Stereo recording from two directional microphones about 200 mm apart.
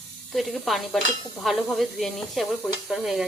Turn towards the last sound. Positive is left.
turn(degrees=0)  # may be behind; listen again after turning